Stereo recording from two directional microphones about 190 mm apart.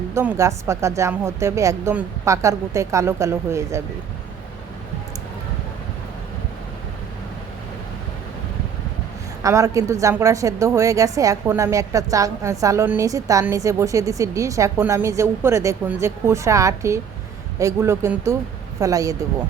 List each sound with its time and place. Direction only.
0.1 s a woman's voice: 15° right (ahead or behind)
9.4 s a woman's voice: 15° right (ahead or behind)